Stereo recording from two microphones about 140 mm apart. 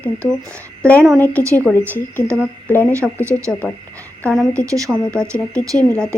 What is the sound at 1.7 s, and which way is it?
Speech, 15° left (ahead or behind).